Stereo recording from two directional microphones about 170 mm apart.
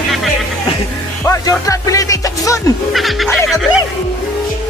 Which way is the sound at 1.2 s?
20° left (ahead or behind).